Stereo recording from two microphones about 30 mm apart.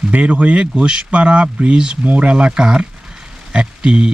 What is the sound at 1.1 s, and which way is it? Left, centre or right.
Speech, right.